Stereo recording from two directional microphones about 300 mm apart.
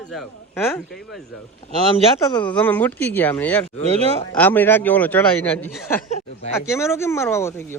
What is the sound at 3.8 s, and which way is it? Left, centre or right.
Speech, right.